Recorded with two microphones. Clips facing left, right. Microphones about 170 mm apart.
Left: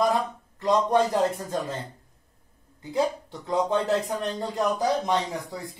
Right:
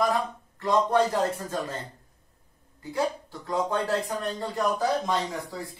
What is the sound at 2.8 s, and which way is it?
Speech, 20° left (ahead or behind).